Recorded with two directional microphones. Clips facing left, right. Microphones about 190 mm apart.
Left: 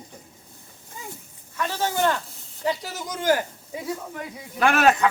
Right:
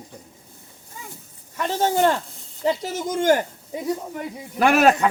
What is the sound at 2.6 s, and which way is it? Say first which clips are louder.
Speech: right 4 dB; 25° right (ahead or behind).